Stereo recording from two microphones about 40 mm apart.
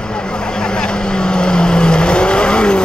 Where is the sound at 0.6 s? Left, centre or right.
Left.